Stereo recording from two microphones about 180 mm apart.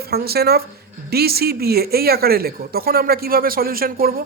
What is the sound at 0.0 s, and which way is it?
Speech, 60° right (ahead or behind).